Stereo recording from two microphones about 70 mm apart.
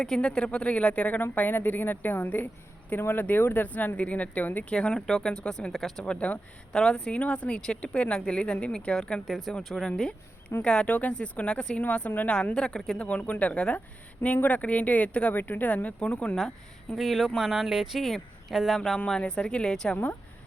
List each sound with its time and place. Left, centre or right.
0.0 s speech: centre
6.0 s speech: centre
16.0 s speech: centre
16.9 s speech: centre
18.9 s speech: centre